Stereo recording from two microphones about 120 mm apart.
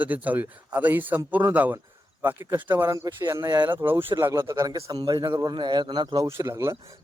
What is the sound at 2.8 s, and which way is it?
Speech, 30° right (ahead or behind).